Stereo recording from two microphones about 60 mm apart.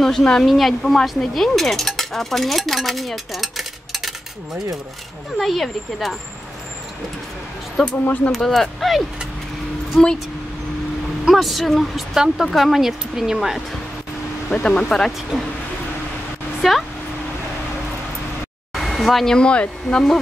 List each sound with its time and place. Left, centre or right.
0.0 s speech: centre
5.4 s speech: centre
7.9 s speech: left
8.3 s speech: centre
11.2 s speech: centre
14.5 s speech: centre
16.6 s speech: centre
18.8 s a sound: centre
19.3 s speech: centre